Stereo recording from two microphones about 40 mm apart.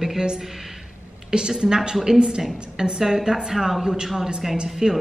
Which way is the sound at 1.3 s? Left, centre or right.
Centre.